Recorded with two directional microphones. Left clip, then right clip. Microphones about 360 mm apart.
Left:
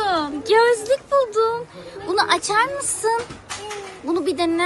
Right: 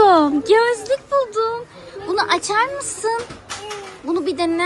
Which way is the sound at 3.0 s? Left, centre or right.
Centre.